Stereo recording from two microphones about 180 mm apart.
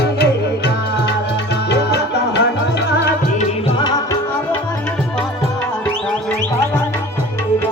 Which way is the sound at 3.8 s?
20° left (ahead or behind).